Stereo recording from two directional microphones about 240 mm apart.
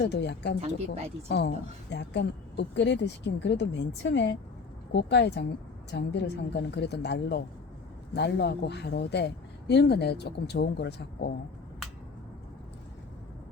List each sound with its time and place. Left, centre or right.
0.0 s speech: left